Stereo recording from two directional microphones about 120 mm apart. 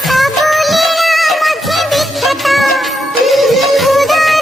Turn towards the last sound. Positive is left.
turn(degrees=0)  # may be behind; listen again after turning